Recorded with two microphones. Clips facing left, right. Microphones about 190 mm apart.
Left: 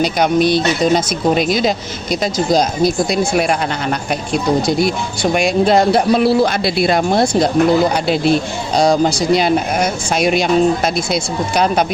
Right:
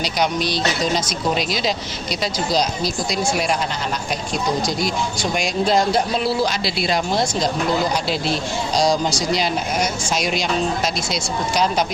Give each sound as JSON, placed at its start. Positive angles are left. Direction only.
{"t": 0.0, "sound": "speech", "side_deg": 55}